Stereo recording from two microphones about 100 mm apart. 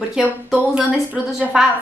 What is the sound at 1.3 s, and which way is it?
Speech, 5° right (ahead or behind).